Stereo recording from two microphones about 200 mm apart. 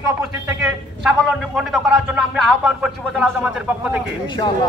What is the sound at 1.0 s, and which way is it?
A man's voice, centre (ahead or behind).